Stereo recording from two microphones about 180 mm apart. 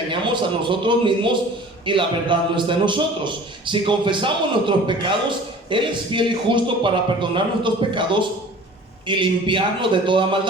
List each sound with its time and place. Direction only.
0.6 s a man's voice: 25° right (ahead or behind)